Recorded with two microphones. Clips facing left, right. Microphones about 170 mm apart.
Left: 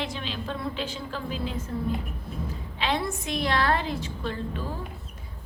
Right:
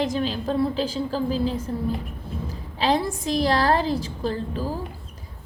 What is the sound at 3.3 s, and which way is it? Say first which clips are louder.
A woman's voice: right 5 dB; 35° right (ahead or behind).